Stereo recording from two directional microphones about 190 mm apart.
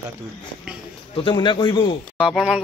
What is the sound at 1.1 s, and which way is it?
Speech, 30° left (ahead or behind).